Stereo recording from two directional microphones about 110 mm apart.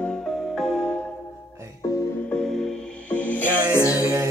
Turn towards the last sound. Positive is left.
turn(degrees=25)  # may be behind; listen again after turning